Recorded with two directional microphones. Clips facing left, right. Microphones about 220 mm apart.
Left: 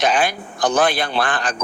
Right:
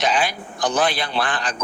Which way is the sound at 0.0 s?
50° left (ahead or behind).